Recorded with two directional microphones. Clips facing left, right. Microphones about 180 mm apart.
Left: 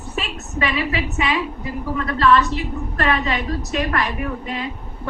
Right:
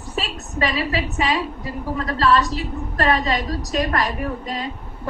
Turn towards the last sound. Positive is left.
turn(degrees=-35)  # may be behind; listen again after turning